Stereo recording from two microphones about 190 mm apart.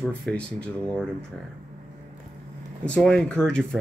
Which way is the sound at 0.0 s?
5° left (ahead or behind).